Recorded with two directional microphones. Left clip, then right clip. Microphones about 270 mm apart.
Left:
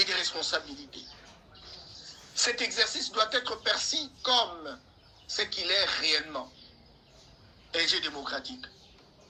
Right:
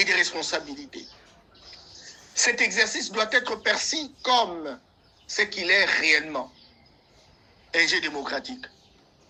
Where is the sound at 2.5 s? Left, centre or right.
Right.